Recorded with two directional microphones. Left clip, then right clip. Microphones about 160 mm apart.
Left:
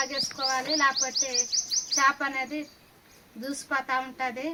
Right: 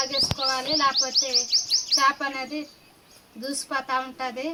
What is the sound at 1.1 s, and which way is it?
Bird, 35° left (ahead or behind).